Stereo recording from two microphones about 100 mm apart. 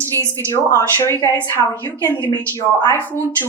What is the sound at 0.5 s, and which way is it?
A woman's voice, 35° left (ahead or behind).